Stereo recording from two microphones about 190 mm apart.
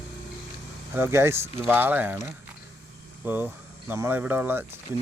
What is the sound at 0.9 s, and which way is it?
Speech, 10° right (ahead or behind).